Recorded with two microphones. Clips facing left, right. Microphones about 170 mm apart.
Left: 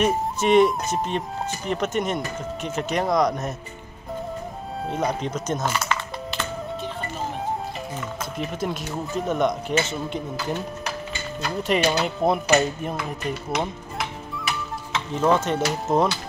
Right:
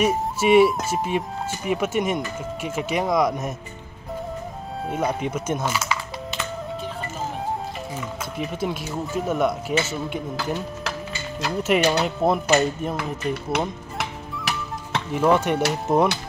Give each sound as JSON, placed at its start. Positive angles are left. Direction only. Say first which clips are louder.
{"t": 0.0, "sound": "speech", "louder": "right 1 dB", "side_deg": -5}
{"t": 4.8, "sound": "speech", "louder": "right 1 dB", "side_deg": -5}
{"t": 8.4, "sound": "speech", "louder": "right 1 dB", "side_deg": -5}
{"t": 11.6, "sound": "speech", "louder": "right 2 dB", "side_deg": -5}
{"t": 12.9, "sound": "speech", "louder": "right 2 dB", "side_deg": -65}
{"t": 13.9, "sound": "music", "louder": "even", "side_deg": -75}
{"t": 15.1, "sound": "speech", "louder": "right 2 dB", "side_deg": -15}